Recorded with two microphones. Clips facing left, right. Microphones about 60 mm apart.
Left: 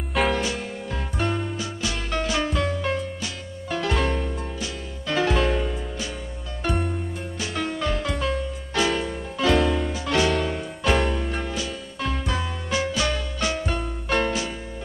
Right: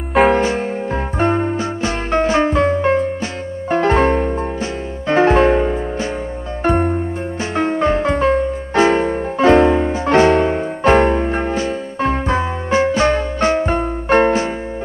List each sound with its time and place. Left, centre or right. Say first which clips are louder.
0.3 s music: right 10 dB; right